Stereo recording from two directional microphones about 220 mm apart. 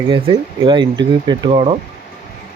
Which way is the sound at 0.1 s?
25° right (ahead or behind).